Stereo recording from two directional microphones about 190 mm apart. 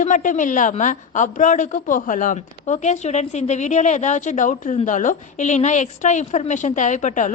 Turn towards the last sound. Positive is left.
turn(degrees=40)  # may be behind; listen again after turning